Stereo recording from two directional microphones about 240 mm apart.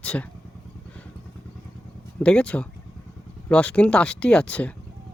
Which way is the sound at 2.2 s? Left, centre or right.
Centre.